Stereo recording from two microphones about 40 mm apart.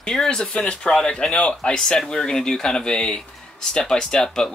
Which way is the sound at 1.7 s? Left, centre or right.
Centre.